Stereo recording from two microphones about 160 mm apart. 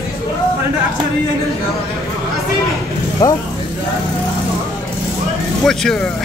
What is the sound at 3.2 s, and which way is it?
Speech, 20° left (ahead or behind).